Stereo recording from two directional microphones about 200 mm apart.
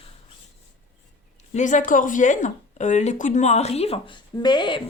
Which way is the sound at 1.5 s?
40° left (ahead or behind).